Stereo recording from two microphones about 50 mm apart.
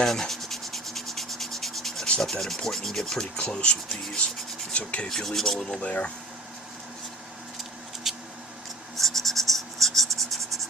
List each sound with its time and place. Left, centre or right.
0.0 s rub: centre
2.6 s speech: centre
3.3 s speech: centre
5.0 s speech: centre
5.8 s speech: left
8.1 s a sound: centre
9.0 s writing: centre
10.1 s writing: right